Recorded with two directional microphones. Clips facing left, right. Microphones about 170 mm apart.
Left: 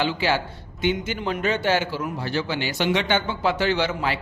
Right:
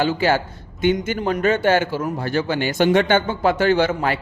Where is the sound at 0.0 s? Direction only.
45° right (ahead or behind).